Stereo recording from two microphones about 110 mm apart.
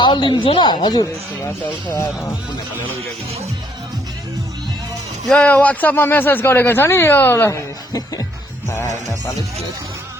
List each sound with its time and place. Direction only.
0.0 s speech: 45° left (ahead or behind)
1.9 s speech: 25° left (ahead or behind)
5.3 s speech: 10° left (ahead or behind)